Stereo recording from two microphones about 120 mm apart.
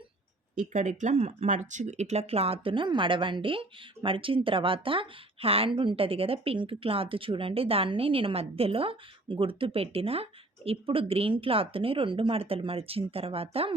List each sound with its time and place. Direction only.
0.5 s speech: 90° right; by 13.7 s 55° right (ahead or behind)